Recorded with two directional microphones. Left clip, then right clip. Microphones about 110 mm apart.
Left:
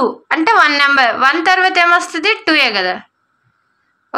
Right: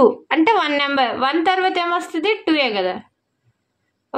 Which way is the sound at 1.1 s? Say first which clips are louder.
Left 6 dB; 20° right (ahead or behind).